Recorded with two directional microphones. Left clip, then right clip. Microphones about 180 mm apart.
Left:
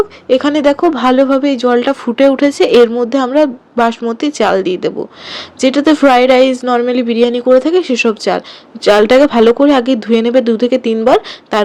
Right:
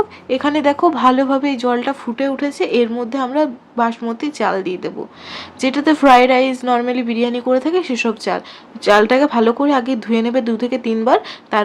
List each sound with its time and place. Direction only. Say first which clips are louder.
0.3 s speech: left 6 dB; 20° left (ahead or behind)
2.0 s speech: left 10 dB; 35° left (ahead or behind)